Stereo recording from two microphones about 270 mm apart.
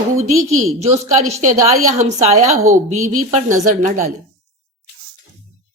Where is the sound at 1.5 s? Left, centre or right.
Right.